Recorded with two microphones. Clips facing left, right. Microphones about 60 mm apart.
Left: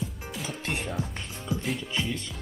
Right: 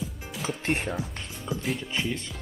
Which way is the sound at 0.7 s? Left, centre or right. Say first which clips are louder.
Right 5 dB; right.